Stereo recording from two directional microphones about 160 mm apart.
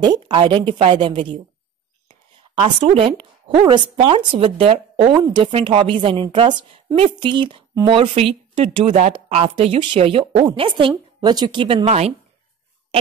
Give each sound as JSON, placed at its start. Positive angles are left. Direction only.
{"t": 0.0, "sound": "speech", "side_deg": -25}
{"t": 2.6, "sound": "speech", "side_deg": -35}
{"t": 11.8, "sound": "speech", "side_deg": -45}